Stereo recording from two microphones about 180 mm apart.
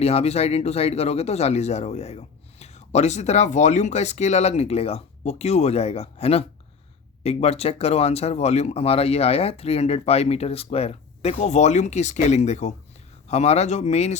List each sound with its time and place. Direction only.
0.0 s speech: 35° left (ahead or behind)